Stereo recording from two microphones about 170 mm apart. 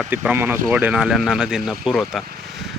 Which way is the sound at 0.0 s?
10° right (ahead or behind).